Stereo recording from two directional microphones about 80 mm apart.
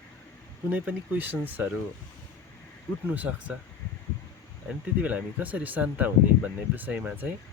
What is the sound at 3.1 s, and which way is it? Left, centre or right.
Speech, centre.